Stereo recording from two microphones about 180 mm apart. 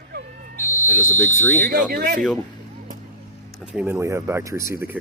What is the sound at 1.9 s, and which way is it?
Speech, 60° right (ahead or behind).